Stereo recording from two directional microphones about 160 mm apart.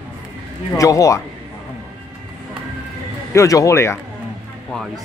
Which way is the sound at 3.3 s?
20° left (ahead or behind).